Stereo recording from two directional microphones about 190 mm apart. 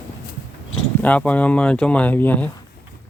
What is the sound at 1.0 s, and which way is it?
Speech, 5° left (ahead or behind).